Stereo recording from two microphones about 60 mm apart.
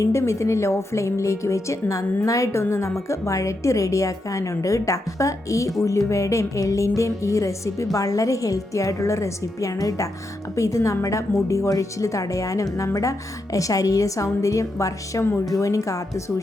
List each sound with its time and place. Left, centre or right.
0.0 s speech: left
7.9 s a woman's voice: left